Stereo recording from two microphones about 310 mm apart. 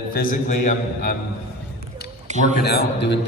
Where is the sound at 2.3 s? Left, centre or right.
Right.